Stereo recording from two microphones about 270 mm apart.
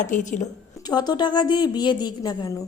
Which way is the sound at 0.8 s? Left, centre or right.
Centre.